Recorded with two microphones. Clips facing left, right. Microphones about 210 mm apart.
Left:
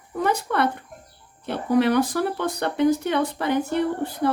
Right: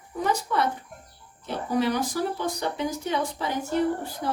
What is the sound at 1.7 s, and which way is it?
A woman's voice, 60° left (ahead or behind).